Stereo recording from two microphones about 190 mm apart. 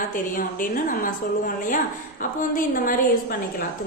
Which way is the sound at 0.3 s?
45° left (ahead or behind).